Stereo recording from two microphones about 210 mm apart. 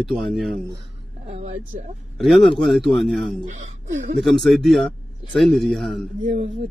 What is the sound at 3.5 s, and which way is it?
Speech, 35° right (ahead or behind).